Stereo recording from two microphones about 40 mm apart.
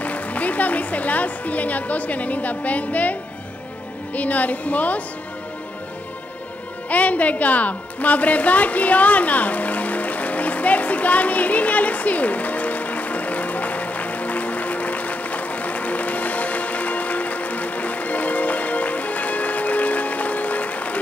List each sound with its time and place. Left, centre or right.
0.0 s a woman's voice: left
6.9 s music: left